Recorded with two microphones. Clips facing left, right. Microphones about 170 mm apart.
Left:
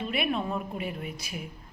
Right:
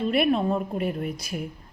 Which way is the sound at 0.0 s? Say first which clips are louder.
Right 7 dB; 40° right (ahead or behind).